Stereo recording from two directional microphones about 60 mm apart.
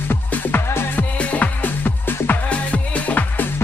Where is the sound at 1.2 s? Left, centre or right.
Left.